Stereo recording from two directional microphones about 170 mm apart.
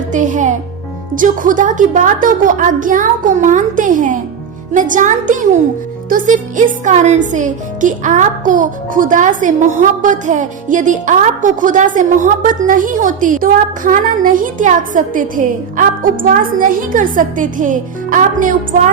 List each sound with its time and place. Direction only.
0.1 s music: 45° right (ahead or behind)
1.1 s speech: 50° right (ahead or behind)